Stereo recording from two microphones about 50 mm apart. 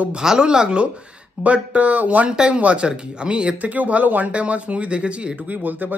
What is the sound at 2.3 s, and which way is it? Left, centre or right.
A man's voice, centre.